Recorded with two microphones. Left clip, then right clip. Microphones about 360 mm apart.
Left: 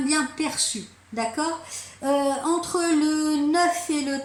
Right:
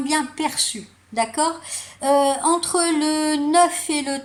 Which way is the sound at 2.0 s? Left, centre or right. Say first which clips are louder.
Right 5 dB; right.